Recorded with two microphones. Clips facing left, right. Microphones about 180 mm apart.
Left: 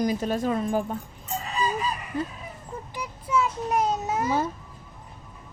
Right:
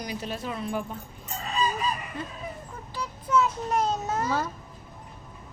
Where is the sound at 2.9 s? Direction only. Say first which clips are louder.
Right 2 dB; 15° left (ahead or behind).